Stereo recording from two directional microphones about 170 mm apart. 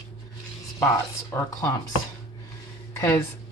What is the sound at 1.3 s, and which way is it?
Speech, 15° left (ahead or behind).